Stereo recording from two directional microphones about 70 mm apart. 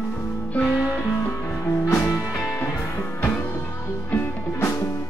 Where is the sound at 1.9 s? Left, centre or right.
Left.